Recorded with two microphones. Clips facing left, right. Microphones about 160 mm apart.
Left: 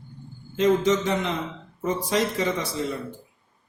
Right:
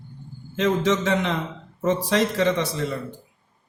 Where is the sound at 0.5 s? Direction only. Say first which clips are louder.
Left 1 dB; 75° right (ahead or behind).